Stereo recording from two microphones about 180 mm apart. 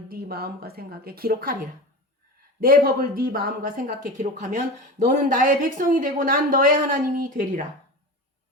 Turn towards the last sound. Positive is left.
turn(degrees=-50)  # may be behind; listen again after turning